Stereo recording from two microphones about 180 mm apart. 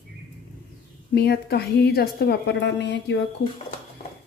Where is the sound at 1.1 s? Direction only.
60° left (ahead or behind).